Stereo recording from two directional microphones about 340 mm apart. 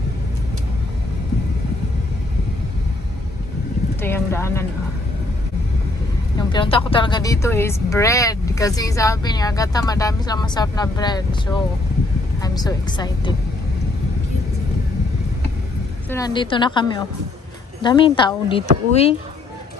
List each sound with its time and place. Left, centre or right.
4.0 s clip-clop: centre
6.3 s a woman's voice: centre
12.4 s a woman's voice: centre
16.1 s a woman's voice: centre